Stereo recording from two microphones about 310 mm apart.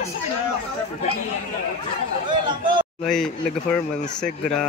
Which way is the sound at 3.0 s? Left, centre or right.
Centre.